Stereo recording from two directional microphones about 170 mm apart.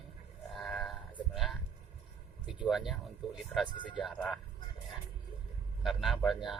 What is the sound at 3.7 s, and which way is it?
Speech, 25° left (ahead or behind).